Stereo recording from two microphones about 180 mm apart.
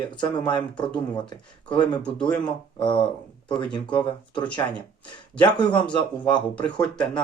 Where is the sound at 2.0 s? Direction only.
5° left (ahead or behind).